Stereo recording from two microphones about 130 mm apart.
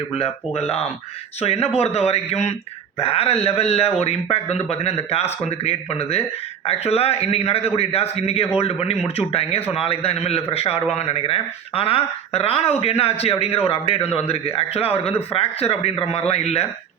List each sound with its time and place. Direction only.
0.1 s a man's voice: 50° left (ahead or behind)